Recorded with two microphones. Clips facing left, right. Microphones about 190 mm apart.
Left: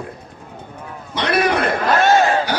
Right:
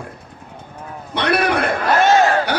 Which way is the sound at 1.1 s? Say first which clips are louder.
Even; 55° right (ahead or behind).